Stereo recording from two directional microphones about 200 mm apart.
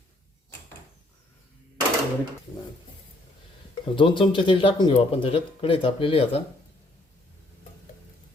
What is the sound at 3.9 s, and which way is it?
Speech, 25° left (ahead or behind).